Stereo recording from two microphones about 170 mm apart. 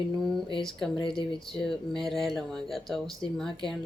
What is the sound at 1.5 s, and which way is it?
Speech, centre (ahead or behind).